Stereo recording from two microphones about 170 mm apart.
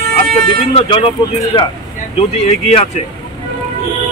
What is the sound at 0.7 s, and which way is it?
Speech, 35° left (ahead or behind).